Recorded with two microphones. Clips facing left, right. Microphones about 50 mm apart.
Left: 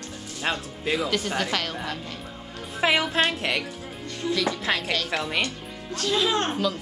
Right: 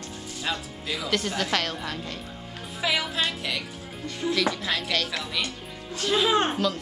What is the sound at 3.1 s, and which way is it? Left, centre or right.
Speech, left.